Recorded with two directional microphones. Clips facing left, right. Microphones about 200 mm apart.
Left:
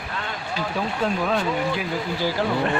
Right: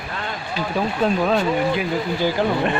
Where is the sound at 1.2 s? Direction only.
20° right (ahead or behind).